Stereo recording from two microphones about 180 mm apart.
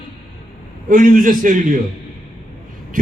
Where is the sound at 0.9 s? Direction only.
50° right (ahead or behind).